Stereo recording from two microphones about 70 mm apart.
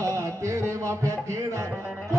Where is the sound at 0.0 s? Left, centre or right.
Right.